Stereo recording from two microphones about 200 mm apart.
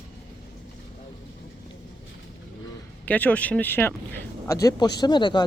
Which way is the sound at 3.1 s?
10° left (ahead or behind).